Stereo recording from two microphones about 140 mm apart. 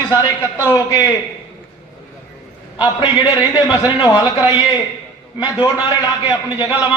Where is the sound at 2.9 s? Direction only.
35° left (ahead or behind).